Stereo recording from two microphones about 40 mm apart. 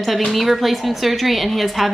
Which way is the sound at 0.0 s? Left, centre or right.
Centre.